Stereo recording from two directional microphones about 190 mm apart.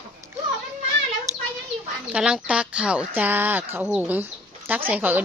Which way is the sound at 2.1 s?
5° right (ahead or behind).